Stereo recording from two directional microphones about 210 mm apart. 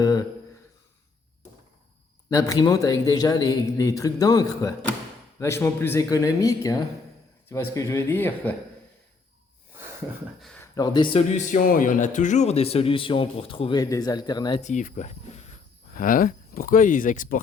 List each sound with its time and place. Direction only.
0.0 s a sound: 15° left (ahead or behind)
2.3 s a man's voice: 15° left (ahead or behind)
10.4 s a sound: 5° left (ahead or behind)
10.8 s speech: 20° left (ahead or behind)
11.5 s speech: 40° left (ahead or behind); by 14.6 s 20° left (ahead or behind)
14.6 s speech: 35° left (ahead or behind)